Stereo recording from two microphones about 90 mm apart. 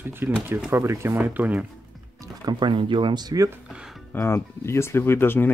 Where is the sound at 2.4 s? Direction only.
60° right (ahead or behind).